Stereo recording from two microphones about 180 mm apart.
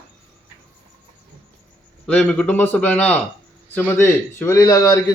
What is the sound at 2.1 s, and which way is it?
A man's voice, 5° left (ahead or behind).